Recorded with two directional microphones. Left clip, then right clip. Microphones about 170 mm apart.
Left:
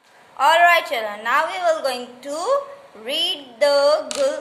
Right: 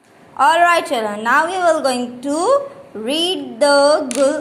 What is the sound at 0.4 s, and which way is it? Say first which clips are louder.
A woman's voice: right 2 dB; 20° right (ahead or behind).